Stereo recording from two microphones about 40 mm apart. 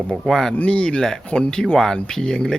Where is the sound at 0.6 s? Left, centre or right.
Left.